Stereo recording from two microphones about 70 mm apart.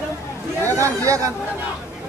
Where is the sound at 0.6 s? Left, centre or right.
Right.